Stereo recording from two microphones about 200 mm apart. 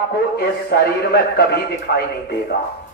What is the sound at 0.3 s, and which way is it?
A man's voice, 55° left (ahead or behind).